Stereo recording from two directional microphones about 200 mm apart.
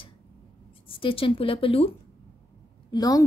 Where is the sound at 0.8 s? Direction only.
25° left (ahead or behind).